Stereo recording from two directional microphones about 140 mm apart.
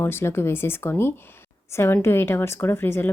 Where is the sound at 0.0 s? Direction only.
15° left (ahead or behind).